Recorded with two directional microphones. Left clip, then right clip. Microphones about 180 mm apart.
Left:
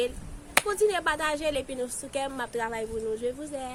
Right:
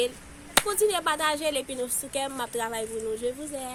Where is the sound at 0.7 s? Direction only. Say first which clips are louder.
Left 1 dB; centre (ahead or behind).